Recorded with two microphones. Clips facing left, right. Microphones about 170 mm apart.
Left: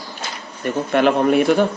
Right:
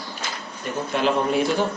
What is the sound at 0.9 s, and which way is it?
Speech, 60° left (ahead or behind).